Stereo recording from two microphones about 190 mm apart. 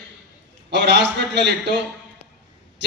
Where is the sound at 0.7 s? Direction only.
65° right (ahead or behind).